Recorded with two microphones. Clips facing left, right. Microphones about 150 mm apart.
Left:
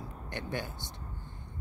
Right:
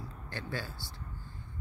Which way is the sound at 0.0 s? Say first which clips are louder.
Left 2 dB; 20° left (ahead or behind).